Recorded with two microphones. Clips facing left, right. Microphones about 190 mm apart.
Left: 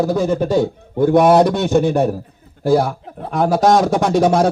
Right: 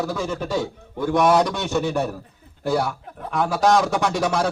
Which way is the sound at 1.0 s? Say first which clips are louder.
Left 7 dB; 55° left (ahead or behind).